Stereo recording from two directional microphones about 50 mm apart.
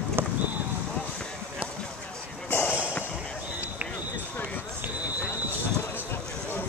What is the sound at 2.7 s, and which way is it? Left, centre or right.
Music, right.